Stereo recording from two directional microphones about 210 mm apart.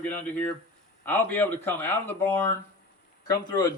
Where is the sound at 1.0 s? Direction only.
10° left (ahead or behind).